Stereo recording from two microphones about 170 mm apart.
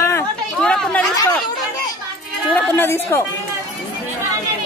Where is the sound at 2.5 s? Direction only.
15° left (ahead or behind).